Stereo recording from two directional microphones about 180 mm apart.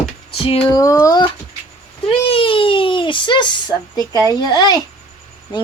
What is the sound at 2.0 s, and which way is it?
Speech, 30° left (ahead or behind).